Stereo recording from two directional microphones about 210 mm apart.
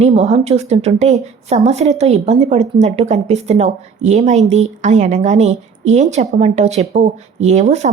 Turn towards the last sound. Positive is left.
turn(degrees=-35)  # may be behind; listen again after turning